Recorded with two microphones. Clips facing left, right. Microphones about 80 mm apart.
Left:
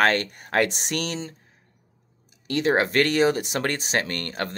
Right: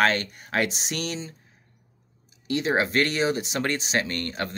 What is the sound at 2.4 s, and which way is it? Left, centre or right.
Speech, left.